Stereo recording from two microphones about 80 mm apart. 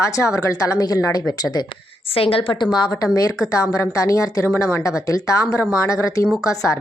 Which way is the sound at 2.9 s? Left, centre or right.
Left.